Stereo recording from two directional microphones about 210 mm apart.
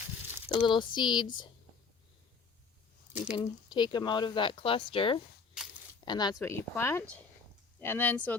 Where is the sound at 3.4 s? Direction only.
20° left (ahead or behind).